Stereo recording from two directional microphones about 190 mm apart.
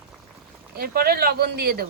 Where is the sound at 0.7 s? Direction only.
55° right (ahead or behind).